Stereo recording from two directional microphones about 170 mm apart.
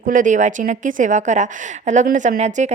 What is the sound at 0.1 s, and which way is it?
Speech, 50° right (ahead or behind).